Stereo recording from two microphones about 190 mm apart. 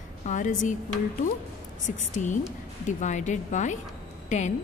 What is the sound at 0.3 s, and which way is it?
Speech, 40° left (ahead or behind).